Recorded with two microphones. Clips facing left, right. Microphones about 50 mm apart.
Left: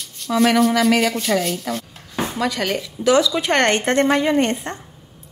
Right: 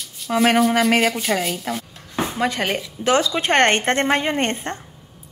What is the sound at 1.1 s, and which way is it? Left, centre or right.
Speech, centre.